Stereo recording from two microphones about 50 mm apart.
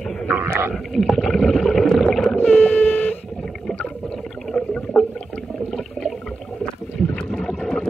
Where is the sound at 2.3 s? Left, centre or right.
Left.